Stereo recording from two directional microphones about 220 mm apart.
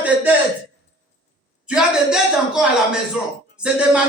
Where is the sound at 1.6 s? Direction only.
5° right (ahead or behind).